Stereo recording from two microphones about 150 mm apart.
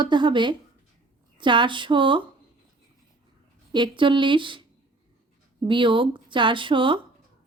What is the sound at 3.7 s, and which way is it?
Speech, 30° right (ahead or behind).